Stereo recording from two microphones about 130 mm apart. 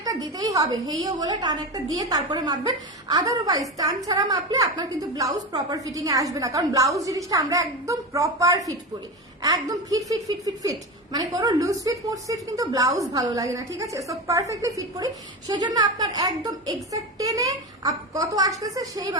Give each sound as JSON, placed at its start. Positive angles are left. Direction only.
{"t": 0.0, "sound": "a woman's voice", "side_deg": -30}